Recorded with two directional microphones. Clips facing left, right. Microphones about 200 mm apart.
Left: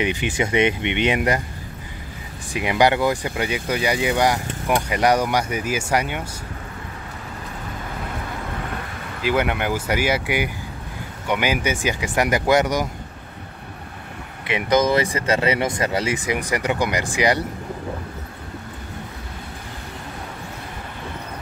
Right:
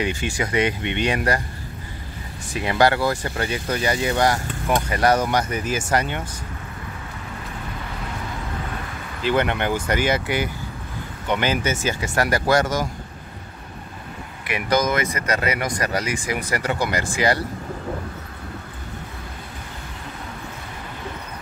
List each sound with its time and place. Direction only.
0.0 s speech: 20° left (ahead or behind)
2.5 s speech: 15° left (ahead or behind)
9.2 s speech: 5° left (ahead or behind)
14.4 s speech: 25° left (ahead or behind)